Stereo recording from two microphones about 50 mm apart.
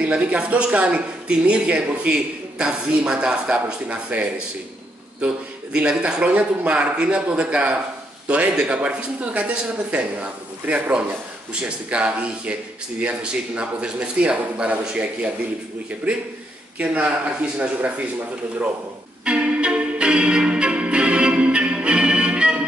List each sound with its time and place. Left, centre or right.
0.0 s a man's voice: right
16.8 s a man's voice: centre
19.2 s music: right